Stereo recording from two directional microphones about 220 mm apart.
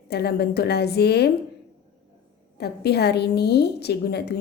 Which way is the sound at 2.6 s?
50° left (ahead or behind).